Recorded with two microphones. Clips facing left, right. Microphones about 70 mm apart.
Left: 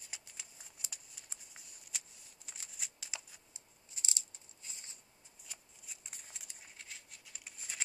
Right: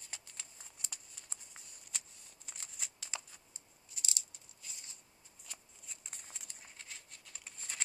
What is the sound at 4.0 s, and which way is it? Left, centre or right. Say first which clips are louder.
Rattle: even; left.